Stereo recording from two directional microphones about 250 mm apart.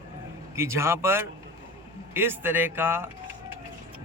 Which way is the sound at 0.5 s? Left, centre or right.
Centre.